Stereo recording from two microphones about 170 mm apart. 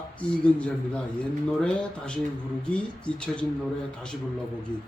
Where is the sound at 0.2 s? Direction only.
5° left (ahead or behind).